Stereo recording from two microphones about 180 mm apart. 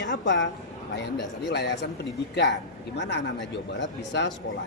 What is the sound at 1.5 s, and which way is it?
Speech, 75° left (ahead or behind).